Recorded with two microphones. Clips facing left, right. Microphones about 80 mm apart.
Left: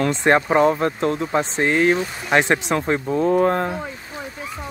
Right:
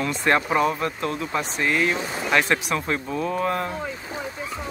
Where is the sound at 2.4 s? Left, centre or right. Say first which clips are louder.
Left 4 dB; left.